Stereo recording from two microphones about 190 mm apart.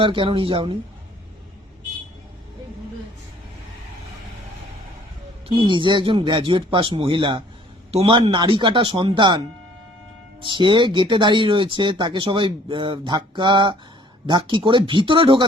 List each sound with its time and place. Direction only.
0.0 s speech: 25° right (ahead or behind)
5.5 s speech: 25° right (ahead or behind)